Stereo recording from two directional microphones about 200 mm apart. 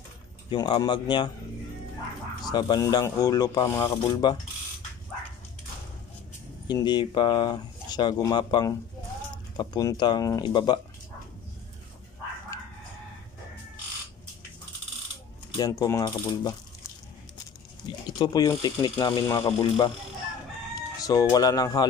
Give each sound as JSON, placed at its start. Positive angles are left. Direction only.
{"t": 0.5, "sound": "speech", "side_deg": 20}
{"t": 2.4, "sound": "speech", "side_deg": 20}
{"t": 6.7, "sound": "speech", "side_deg": 20}
{"t": 15.5, "sound": "mechanisms", "side_deg": 20}
{"t": 18.1, "sound": "speech", "side_deg": 20}